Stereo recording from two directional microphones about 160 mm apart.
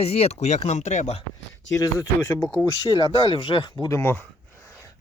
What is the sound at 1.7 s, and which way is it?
Speech, 20° left (ahead or behind).